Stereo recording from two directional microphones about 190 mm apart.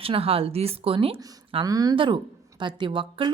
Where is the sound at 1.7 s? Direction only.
20° right (ahead or behind).